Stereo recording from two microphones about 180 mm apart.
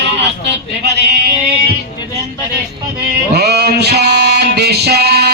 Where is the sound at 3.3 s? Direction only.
65° right (ahead or behind).